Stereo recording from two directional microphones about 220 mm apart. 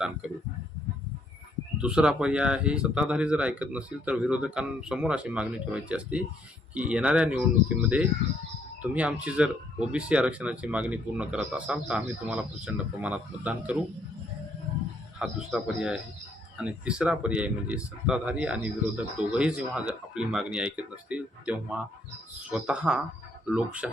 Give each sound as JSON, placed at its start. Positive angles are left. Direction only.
{"t": 1.8, "sound": "speech", "side_deg": -5}
{"t": 15.2, "sound": "speech", "side_deg": 0}